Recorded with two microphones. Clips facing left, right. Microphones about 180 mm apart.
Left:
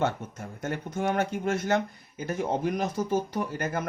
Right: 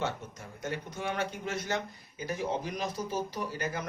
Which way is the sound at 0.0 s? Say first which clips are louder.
Left 6 dB; 55° left (ahead or behind).